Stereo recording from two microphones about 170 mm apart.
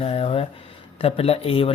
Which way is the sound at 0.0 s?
35° left (ahead or behind).